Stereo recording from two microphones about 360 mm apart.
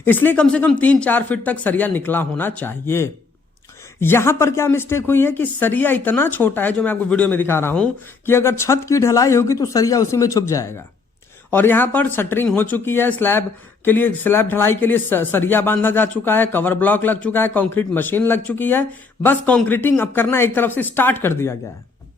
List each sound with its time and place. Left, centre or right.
0.0 s speech: centre